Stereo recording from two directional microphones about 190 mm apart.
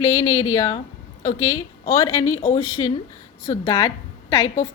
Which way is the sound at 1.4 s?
15° left (ahead or behind).